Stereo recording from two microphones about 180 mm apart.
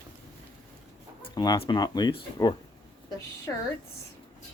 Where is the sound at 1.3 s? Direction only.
20° left (ahead or behind).